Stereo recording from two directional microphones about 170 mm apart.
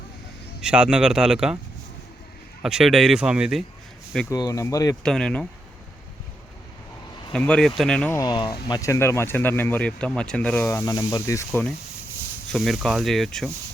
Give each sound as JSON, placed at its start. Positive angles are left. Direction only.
{"t": 0.6, "sound": "speech", "side_deg": -5}
{"t": 2.6, "sound": "speech", "side_deg": -5}
{"t": 4.3, "sound": "speech", "side_deg": 20}
{"t": 5.0, "sound": "speech", "side_deg": 5}
{"t": 7.3, "sound": "speech", "side_deg": 5}
{"t": 8.1, "sound": "speech", "side_deg": 20}
{"t": 12.5, "sound": "speech", "side_deg": 0}